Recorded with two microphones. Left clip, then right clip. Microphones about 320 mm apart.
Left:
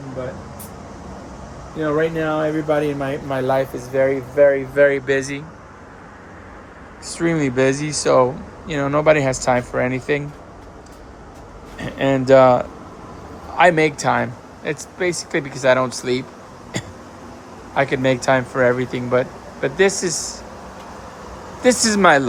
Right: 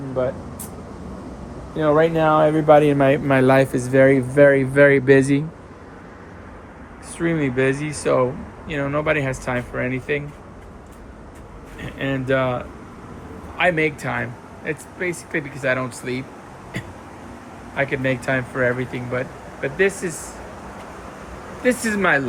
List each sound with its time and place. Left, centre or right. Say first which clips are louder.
1.8 s speech: right 3 dB; centre
2.6 s speech: right 7 dB; right
7.1 s speech: left 2 dB; centre
11.8 s speech: left 7 dB; centre
16.7 s a sound: left 4 dB; centre
18.0 s speech: left 5 dB; centre
21.6 s speech: left 5 dB; centre